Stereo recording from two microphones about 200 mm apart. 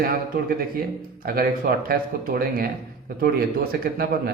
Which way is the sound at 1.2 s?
45° right (ahead or behind).